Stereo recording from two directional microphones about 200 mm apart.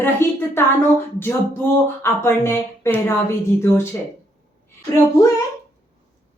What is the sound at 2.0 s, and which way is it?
A woman's voice, 10° left (ahead or behind).